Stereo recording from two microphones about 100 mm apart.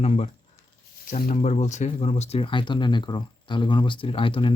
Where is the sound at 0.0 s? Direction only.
90° left.